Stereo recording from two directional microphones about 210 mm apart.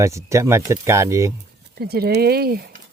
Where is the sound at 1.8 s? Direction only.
50° right (ahead or behind).